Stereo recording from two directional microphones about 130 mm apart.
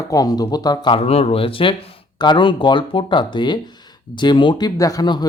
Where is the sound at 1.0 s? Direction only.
50° left (ahead or behind).